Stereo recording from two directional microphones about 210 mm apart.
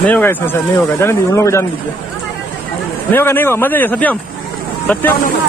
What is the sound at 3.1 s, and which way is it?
Speech, 10° left (ahead or behind).